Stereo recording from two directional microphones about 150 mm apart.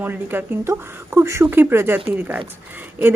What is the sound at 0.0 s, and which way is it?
Speech, 15° right (ahead or behind).